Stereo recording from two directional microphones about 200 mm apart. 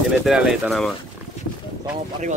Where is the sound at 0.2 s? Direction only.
Centre (ahead or behind).